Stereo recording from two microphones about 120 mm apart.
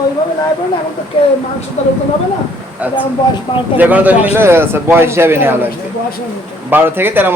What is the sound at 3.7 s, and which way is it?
A man's voice, 15° right (ahead or behind).